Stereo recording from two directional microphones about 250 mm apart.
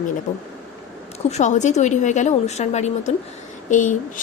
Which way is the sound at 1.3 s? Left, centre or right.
Left.